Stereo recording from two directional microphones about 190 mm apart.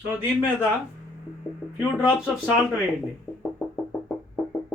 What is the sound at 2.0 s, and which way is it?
Speech, centre (ahead or behind).